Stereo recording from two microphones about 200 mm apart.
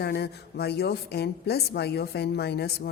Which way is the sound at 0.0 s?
55° left (ahead or behind).